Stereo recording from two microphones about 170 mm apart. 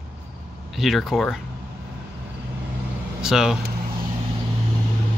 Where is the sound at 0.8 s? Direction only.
Centre (ahead or behind).